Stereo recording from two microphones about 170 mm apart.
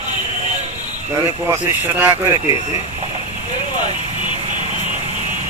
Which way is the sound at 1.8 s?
10° right (ahead or behind).